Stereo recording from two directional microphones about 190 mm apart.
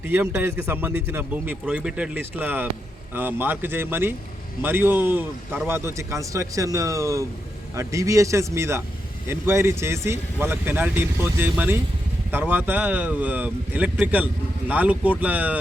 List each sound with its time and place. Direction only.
0.1 s a man's voice: 10° right (ahead or behind)